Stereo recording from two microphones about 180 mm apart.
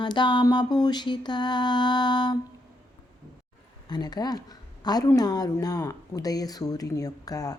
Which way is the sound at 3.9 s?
20° left (ahead or behind).